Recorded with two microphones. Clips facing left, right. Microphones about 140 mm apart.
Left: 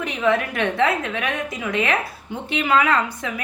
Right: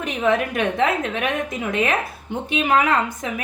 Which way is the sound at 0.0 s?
20° right (ahead or behind).